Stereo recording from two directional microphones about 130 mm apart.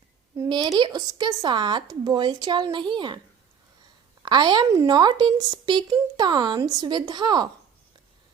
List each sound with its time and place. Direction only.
0.4 s speech: 35° right (ahead or behind)
4.2 s a woman's voice: 35° right (ahead or behind)